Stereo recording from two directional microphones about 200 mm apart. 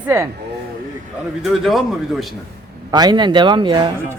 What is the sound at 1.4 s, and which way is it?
Speech, centre (ahead or behind).